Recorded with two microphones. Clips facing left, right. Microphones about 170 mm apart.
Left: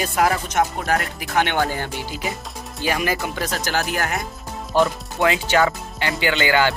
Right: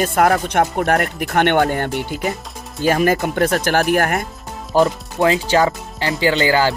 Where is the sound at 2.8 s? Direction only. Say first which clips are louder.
Right 7 dB; 45° right (ahead or behind).